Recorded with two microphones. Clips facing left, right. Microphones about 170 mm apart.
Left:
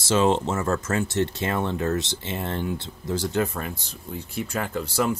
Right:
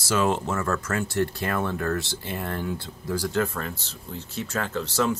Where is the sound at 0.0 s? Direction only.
25° left (ahead or behind).